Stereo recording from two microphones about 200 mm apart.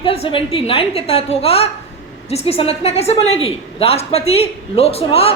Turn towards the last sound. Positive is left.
turn(degrees=30)  # may be behind; listen again after turning